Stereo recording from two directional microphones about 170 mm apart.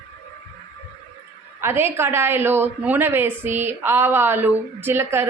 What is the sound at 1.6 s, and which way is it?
A woman's voice, 15° right (ahead or behind).